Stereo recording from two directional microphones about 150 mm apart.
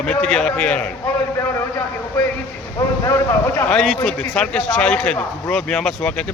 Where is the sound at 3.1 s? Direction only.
15° left (ahead or behind).